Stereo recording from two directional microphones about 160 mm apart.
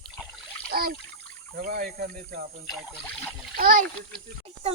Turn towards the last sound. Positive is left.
turn(degrees=-65)  # may be behind; listen again after turning